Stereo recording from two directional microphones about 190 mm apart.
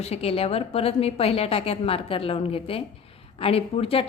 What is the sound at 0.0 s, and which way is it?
A woman's voice, 30° left (ahead or behind).